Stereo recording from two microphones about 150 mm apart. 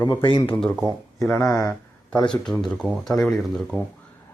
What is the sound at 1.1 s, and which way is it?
Speech, 15° left (ahead or behind).